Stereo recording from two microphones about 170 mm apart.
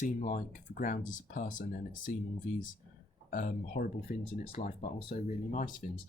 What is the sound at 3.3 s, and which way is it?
Speech, 50° left (ahead or behind).